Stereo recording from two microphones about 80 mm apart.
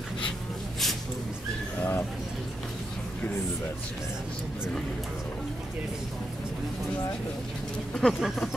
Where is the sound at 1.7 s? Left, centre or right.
Left.